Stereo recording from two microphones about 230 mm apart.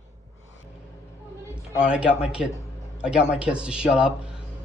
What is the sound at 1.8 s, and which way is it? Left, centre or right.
Speech, centre.